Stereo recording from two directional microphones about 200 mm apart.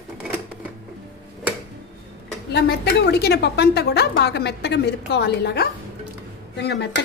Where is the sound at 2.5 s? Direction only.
55° left (ahead or behind).